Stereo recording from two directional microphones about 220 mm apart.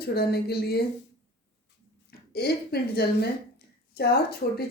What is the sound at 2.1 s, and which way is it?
A woman's voice, 45° left (ahead or behind).